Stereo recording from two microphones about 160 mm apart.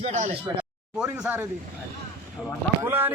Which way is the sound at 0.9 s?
5° right (ahead or behind).